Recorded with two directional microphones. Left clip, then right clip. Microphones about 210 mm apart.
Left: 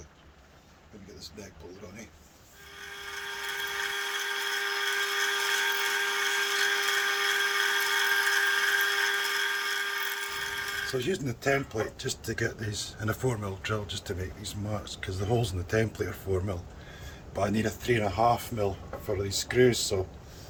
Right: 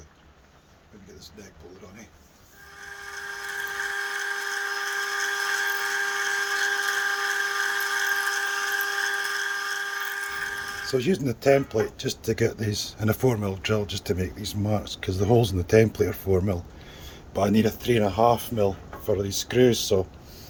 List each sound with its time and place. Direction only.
2.8 s dental drill: 10° left (ahead or behind)
10.9 s speech: 45° right (ahead or behind)